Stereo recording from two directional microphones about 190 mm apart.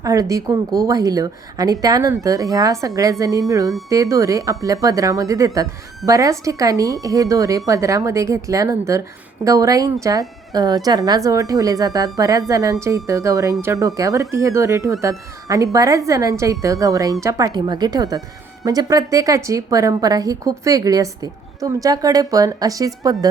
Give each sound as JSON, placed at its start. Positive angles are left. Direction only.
{"t": 0.0, "sound": "a woman's voice", "side_deg": -15}